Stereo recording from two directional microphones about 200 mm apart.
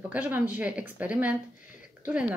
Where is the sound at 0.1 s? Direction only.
5° right (ahead or behind).